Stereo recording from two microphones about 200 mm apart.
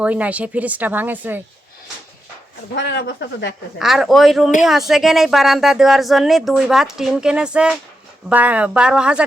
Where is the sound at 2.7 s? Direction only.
60° left (ahead or behind).